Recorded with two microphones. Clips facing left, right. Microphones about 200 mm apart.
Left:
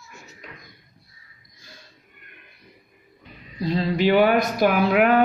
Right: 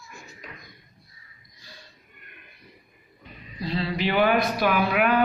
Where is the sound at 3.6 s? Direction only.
45° left (ahead or behind).